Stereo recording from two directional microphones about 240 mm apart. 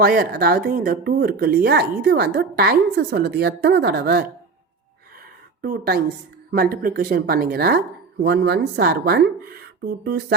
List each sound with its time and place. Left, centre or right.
0.0 s speech: right
5.6 s speech: right